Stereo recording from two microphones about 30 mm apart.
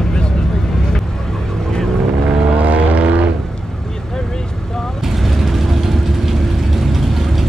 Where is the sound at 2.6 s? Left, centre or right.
Right.